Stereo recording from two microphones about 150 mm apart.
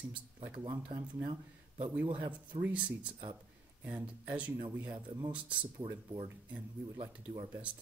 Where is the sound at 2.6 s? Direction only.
10° right (ahead or behind).